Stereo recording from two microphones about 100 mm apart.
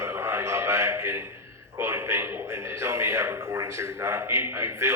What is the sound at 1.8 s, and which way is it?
A man's voice, 25° right (ahead or behind).